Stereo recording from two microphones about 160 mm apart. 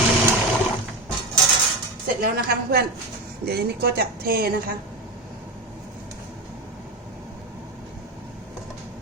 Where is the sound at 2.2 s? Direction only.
70° right (ahead or behind).